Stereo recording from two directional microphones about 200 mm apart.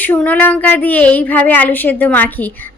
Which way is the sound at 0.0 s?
10° left (ahead or behind).